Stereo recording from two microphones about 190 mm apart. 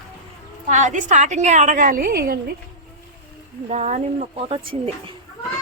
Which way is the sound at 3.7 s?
40° right (ahead or behind).